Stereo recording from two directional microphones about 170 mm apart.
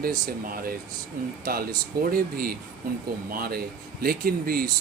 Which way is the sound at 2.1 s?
60° right (ahead or behind).